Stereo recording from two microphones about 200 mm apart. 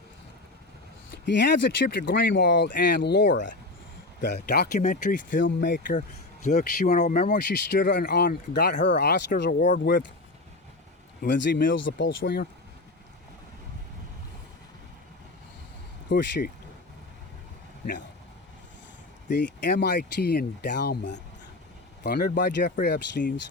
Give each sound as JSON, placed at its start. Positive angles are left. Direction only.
{"t": 1.2, "sound": "speech", "side_deg": 60}
{"t": 4.4, "sound": "speech", "side_deg": 55}
{"t": 4.8, "sound": "speech", "side_deg": 40}
{"t": 5.4, "sound": "speech", "side_deg": 60}
{"t": 6.0, "sound": "speech", "side_deg": 35}
{"t": 8.0, "sound": "speech", "side_deg": 50}
{"t": 11.2, "sound": "speech", "side_deg": 60}
{"t": 16.0, "sound": "speech", "side_deg": 60}
{"t": 19.3, "sound": "speech", "side_deg": 60}